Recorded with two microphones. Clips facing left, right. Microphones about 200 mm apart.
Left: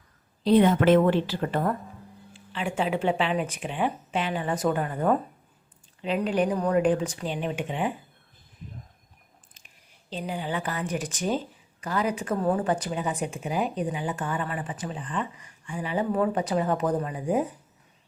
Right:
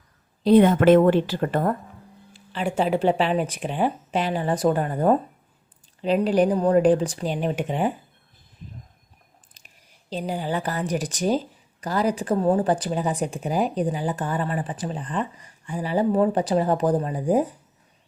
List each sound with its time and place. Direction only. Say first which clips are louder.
0.4 s a woman's voice: right 4 dB; 50° right (ahead or behind)
2.3 s speech: right 4 dB; 40° right (ahead or behind)
9.6 s speech: right 2 dB; 40° right (ahead or behind)